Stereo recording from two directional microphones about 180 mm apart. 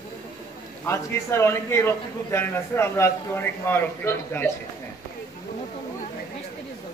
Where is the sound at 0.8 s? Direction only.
15° left (ahead or behind).